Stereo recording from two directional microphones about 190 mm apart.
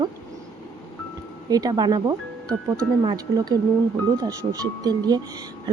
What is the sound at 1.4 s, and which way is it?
Speech, 20° right (ahead or behind).